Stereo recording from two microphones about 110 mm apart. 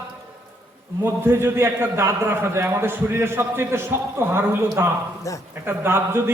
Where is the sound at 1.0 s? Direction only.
20° right (ahead or behind).